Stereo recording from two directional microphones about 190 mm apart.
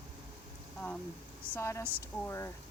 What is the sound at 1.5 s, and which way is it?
Speech, 15° left (ahead or behind).